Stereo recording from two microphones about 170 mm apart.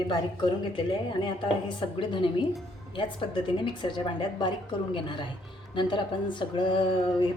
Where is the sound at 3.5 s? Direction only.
25° left (ahead or behind).